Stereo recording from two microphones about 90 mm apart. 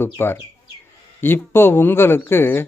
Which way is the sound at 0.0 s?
25° left (ahead or behind).